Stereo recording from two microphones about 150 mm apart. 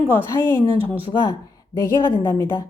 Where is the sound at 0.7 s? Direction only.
40° right (ahead or behind).